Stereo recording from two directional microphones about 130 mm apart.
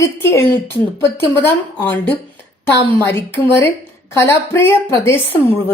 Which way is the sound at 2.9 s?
15° left (ahead or behind).